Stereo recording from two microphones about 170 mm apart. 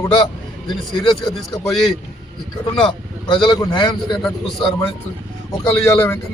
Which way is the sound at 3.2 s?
25° left (ahead or behind).